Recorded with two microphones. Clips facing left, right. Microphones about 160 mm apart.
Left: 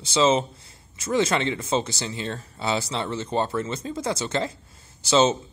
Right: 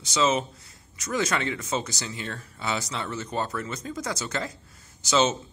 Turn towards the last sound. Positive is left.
turn(degrees=30)  # may be behind; listen again after turning